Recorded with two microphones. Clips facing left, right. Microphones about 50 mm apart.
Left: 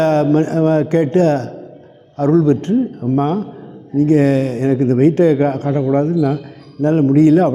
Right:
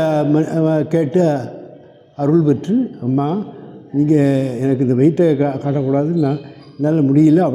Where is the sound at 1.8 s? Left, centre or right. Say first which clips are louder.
Left 2 dB; left.